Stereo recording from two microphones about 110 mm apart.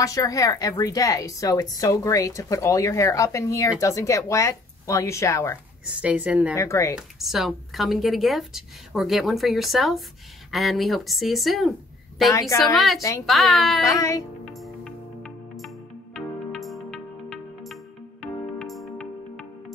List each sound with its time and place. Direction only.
0.0 s a woman's voice: 30° left (ahead or behind)
5.9 s a woman's voice: 15° right (ahead or behind)
6.5 s speech: 30° left (ahead or behind)
7.0 s speech: centre (ahead or behind)
12.3 s speech: 30° left (ahead or behind)
12.5 s speech: centre (ahead or behind)
13.8 s speech: 30° left (ahead or behind)
14.4 s music: centre (ahead or behind)